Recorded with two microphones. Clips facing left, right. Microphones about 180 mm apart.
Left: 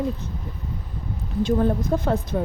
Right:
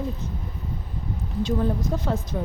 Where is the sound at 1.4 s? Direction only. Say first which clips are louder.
Left 4 dB; 50° left (ahead or behind).